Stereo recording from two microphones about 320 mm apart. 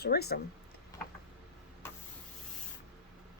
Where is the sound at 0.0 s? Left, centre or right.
Left.